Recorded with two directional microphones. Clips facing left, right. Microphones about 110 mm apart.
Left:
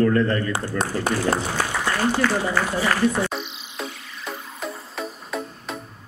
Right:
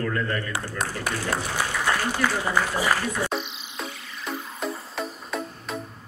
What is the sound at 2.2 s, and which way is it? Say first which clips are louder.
A man's voice: left 2 dB; 15° right (ahead or behind).